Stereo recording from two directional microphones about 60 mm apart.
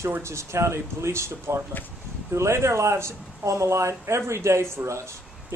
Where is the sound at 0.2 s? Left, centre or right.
Right.